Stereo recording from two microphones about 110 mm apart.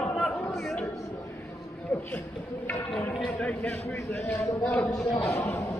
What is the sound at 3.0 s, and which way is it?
A man's voice, 10° left (ahead or behind).